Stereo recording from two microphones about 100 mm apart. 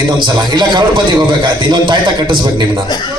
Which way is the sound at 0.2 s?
50° right (ahead or behind).